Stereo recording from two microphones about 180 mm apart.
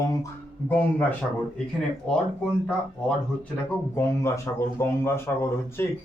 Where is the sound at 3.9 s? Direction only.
15° left (ahead or behind).